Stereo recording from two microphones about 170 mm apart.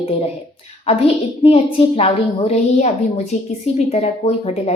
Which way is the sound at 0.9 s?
35° left (ahead or behind).